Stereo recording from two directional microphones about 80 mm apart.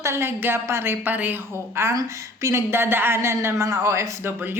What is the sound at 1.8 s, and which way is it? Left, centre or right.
A woman's voice, right.